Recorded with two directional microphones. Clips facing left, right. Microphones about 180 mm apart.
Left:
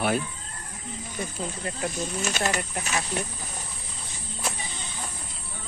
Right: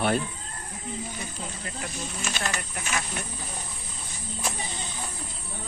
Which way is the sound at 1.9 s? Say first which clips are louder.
Left 6 dB; 45° left (ahead or behind).